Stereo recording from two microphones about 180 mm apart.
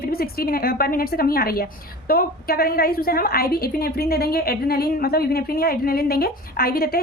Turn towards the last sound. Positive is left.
turn(degrees=55)  # may be behind; listen again after turning